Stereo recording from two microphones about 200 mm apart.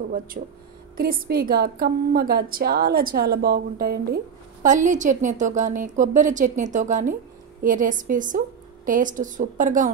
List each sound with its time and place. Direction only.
0.3 s a woman's voice: 40° right (ahead or behind)
4.6 s a woman's voice: 40° right (ahead or behind)